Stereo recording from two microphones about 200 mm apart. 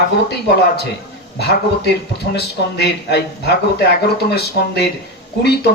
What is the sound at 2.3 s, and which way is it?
A man's voice, 55° left (ahead or behind).